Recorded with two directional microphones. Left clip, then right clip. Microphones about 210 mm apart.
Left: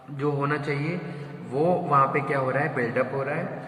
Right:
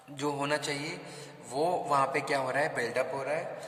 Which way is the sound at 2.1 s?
75° right (ahead or behind).